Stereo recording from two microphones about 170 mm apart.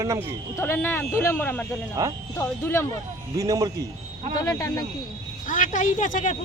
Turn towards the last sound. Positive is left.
turn(degrees=50)  # may be behind; listen again after turning